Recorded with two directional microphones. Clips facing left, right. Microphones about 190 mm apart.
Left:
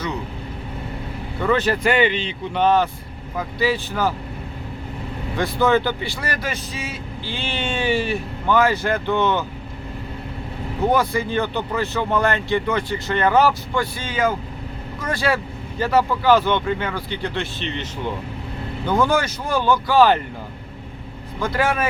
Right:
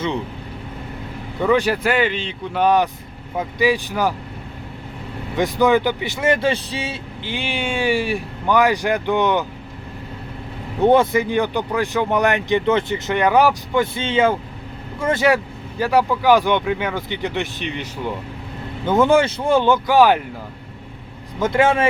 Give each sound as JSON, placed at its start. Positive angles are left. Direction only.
{"t": 1.4, "sound": "speech", "side_deg": -15}
{"t": 2.6, "sound": "speech", "side_deg": -15}
{"t": 5.4, "sound": "speech", "side_deg": -15}
{"t": 7.3, "sound": "speech", "side_deg": -15}
{"t": 10.8, "sound": "speech", "side_deg": -25}
{"t": 18.9, "sound": "speech", "side_deg": -25}
{"t": 21.3, "sound": "speech", "side_deg": -20}